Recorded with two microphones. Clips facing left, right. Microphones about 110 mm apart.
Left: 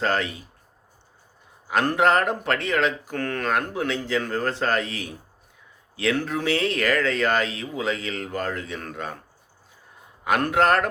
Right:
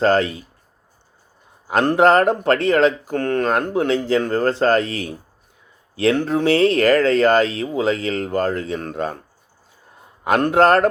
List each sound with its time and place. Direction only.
0.0 s speech: 35° right (ahead or behind)
1.6 s speech: 30° right (ahead or behind)
10.2 s speech: 30° right (ahead or behind)